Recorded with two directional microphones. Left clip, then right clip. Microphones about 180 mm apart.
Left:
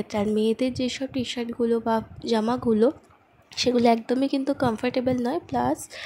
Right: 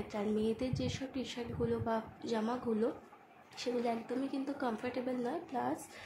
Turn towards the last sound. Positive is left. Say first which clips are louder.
# left 12 dB
turn(degrees=50)  # may be behind; listen again after turning